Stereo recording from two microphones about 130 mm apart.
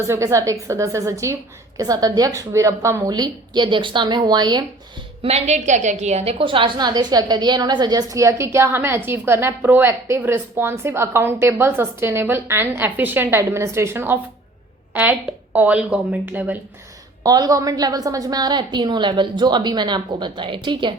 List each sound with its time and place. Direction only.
0.1 s a woman's voice: 25° right (ahead or behind)
5.2 s a woman's voice: 55° right (ahead or behind)
6.4 s a woman's voice: 40° right (ahead or behind); by 16.6 s 10° right (ahead or behind)
17.2 s a woman's voice: 30° right (ahead or behind)